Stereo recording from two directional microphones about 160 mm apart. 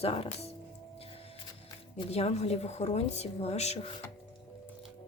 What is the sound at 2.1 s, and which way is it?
Speech, 40° left (ahead or behind).